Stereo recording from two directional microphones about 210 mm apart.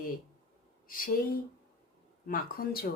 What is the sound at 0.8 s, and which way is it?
Speech, 40° left (ahead or behind).